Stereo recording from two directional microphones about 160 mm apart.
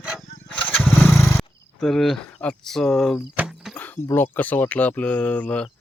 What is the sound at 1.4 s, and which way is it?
Speech, centre (ahead or behind).